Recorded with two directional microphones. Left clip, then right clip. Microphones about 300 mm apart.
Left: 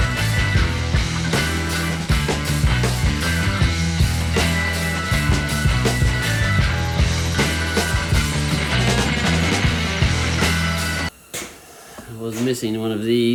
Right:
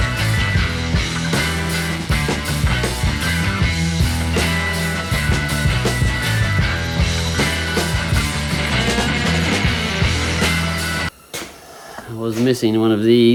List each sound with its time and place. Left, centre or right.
12.5 s speech: right